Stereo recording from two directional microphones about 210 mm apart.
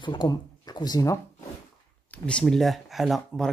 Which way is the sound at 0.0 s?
20° left (ahead or behind).